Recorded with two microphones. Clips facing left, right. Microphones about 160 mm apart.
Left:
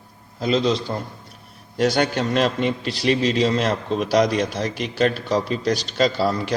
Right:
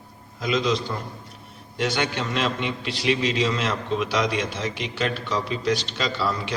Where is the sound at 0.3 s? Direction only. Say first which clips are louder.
Left 3 dB; 30° left (ahead or behind).